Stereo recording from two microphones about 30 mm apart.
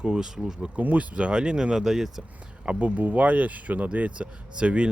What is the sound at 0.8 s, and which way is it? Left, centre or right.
Speech, right.